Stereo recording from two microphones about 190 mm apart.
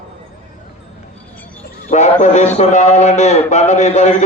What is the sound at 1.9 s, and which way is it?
A man's voice, 40° left (ahead or behind).